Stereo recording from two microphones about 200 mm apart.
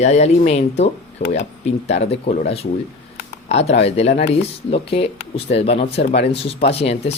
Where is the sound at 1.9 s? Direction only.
30° left (ahead or behind).